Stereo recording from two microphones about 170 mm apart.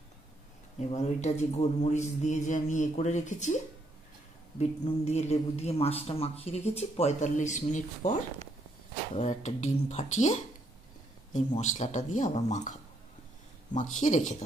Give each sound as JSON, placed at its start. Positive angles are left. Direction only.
{"t": 0.7, "sound": "a man's voice", "side_deg": 40}
{"t": 4.6, "sound": "a man's voice", "side_deg": 40}